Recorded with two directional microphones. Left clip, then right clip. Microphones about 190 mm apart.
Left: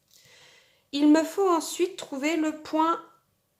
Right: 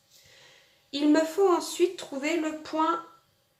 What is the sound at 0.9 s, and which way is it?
Speech, 25° left (ahead or behind).